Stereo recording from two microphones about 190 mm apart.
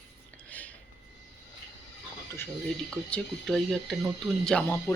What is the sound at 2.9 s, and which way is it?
Speech, 5° left (ahead or behind).